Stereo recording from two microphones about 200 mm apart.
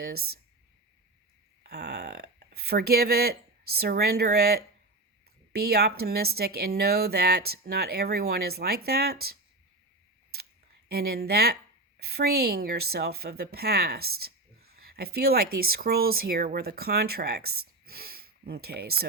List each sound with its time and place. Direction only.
0.0 s speech: 50° right (ahead or behind)
1.6 s a woman's voice: 55° right (ahead or behind)
10.8 s a woman's voice: 50° right (ahead or behind)